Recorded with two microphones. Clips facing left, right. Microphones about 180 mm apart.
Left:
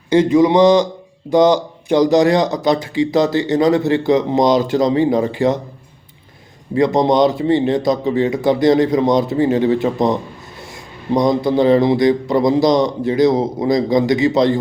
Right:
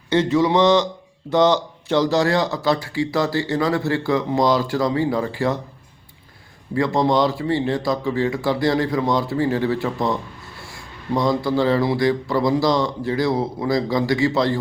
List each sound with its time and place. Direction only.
0.1 s speech: 15° left (ahead or behind)
6.7 s speech: 20° left (ahead or behind)